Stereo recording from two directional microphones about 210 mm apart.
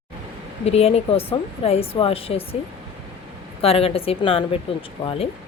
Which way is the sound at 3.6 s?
25° left (ahead or behind).